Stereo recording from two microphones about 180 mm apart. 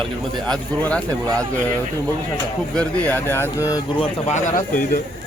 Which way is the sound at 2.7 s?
10° left (ahead or behind).